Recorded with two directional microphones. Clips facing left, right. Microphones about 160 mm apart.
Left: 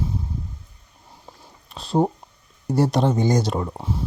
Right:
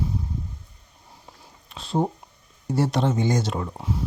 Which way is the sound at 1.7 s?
40° left (ahead or behind).